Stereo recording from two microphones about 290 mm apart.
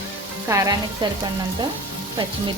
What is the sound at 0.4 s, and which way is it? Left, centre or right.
Frying, centre.